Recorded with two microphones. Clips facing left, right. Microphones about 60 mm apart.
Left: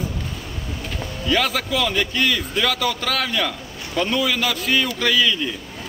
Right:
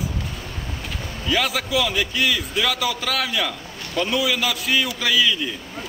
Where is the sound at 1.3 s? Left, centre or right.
Centre.